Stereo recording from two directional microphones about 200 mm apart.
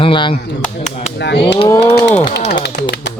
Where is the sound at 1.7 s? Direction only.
15° left (ahead or behind).